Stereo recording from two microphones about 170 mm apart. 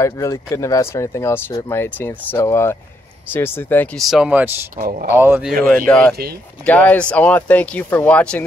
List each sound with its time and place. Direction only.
0.0 s speech: 20° left (ahead or behind)
4.1 s speech: 5° right (ahead or behind)
4.7 s speech: 60° right (ahead or behind)
5.1 s speech: 15° right (ahead or behind)
5.9 s speech: 5° left (ahead or behind)